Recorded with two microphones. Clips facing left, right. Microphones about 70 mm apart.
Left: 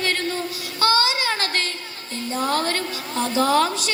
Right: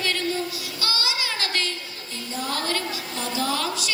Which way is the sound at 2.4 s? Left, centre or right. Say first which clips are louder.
Left 4 dB; left.